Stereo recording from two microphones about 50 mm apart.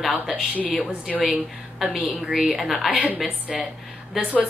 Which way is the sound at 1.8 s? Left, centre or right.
Centre.